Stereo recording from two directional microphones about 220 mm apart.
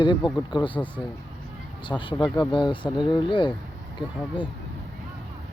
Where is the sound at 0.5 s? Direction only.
20° left (ahead or behind).